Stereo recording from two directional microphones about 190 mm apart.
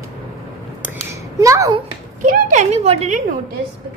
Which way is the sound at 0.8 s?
15° right (ahead or behind).